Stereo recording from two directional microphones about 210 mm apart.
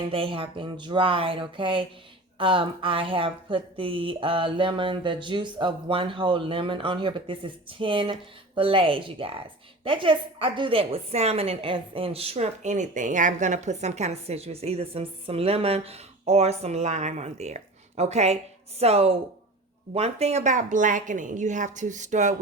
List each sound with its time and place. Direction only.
0.0 s a woman's voice: 25° right (ahead or behind)